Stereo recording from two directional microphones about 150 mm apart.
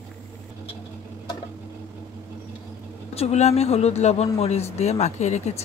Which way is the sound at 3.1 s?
45° left (ahead or behind).